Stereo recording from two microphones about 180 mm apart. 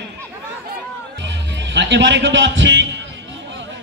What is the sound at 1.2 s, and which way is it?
Music, 80° right.